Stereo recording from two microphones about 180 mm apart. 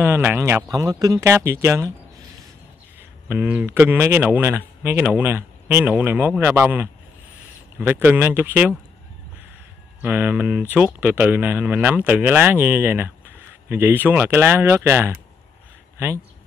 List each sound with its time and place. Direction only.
0.0 s speech: 15° right (ahead or behind)
3.0 s speech: 10° right (ahead or behind)
10.0 s speech: 10° right (ahead or behind)